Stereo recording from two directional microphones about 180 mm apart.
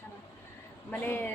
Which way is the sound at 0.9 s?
10° left (ahead or behind).